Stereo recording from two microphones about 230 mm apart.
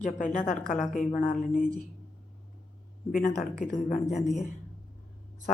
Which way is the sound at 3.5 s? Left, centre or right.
Left.